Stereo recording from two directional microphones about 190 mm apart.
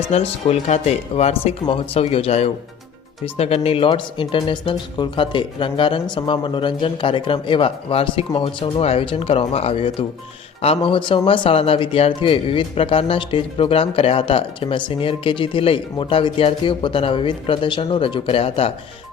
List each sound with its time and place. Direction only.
0.1 s speech: 35° left (ahead or behind)